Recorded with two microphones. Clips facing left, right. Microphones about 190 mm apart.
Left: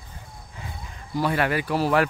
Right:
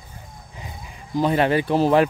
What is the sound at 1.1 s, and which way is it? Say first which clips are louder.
Speech: right 5 dB; 20° right (ahead or behind).